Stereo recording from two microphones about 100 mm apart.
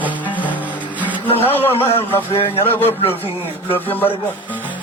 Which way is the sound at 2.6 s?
20° left (ahead or behind).